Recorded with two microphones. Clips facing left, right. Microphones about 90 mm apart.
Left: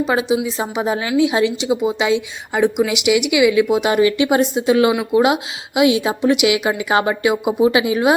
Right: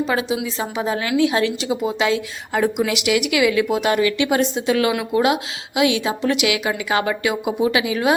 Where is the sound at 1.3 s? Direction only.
10° left (ahead or behind).